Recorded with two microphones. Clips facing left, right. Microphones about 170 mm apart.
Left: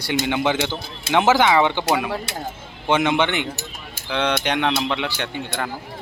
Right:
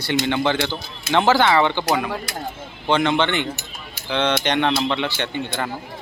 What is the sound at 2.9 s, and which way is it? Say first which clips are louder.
Speech: even; 20° left (ahead or behind).